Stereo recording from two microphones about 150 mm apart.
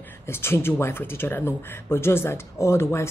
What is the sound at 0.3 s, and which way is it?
Speech, 15° left (ahead or behind).